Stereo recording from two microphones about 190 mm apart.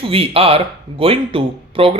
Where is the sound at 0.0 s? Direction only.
30° right (ahead or behind).